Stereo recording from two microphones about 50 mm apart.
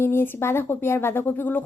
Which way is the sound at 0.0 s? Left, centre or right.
Left.